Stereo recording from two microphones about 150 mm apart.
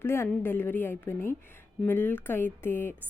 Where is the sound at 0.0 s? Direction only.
15° left (ahead or behind).